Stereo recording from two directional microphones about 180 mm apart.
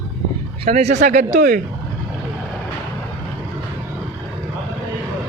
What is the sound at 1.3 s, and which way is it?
Speech, 55° right (ahead or behind).